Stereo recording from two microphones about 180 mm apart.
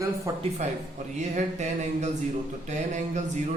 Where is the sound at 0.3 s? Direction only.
20° right (ahead or behind).